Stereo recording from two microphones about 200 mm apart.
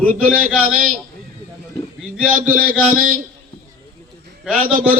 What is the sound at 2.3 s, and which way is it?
Speech, 45° right (ahead or behind).